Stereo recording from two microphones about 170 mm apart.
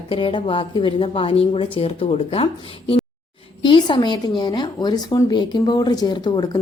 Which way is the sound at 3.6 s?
30° left (ahead or behind).